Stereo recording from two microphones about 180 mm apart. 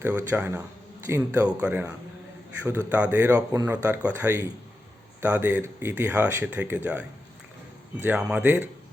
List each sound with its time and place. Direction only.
0.0 s speech: 10° right (ahead or behind)
8.0 s speech: 10° right (ahead or behind)